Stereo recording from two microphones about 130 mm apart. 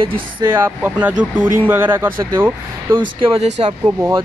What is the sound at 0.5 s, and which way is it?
Speech, 15° right (ahead or behind).